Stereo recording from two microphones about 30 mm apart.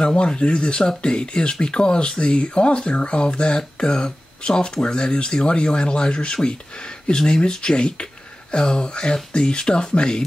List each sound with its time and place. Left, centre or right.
0.0 s speech: left